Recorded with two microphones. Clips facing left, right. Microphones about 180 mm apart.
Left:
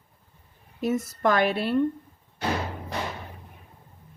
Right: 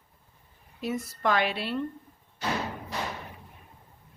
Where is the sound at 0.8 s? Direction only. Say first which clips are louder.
Left 5 dB; 45° left (ahead or behind).